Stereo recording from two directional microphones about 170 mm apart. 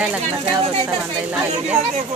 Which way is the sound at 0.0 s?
5° right (ahead or behind).